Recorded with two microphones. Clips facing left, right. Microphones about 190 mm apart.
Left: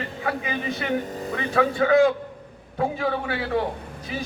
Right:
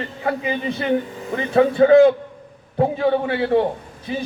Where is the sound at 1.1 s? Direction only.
40° left (ahead or behind).